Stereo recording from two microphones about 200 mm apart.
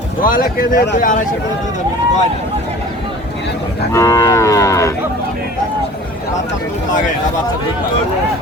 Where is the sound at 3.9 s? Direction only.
15° left (ahead or behind).